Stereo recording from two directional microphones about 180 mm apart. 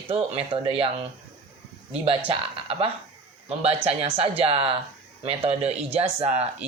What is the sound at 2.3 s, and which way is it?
Speech, 30° right (ahead or behind).